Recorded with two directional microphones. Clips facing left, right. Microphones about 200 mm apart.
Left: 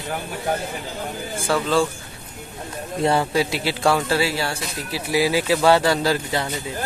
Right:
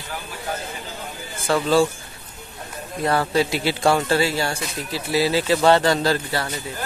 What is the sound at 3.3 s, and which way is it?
Speech, centre (ahead or behind).